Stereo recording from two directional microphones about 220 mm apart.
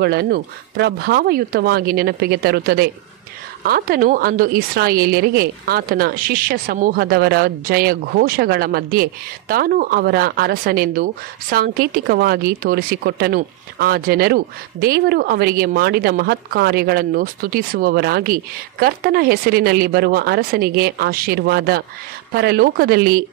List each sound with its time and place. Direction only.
0.0 s a woman's voice: 45° right (ahead or behind)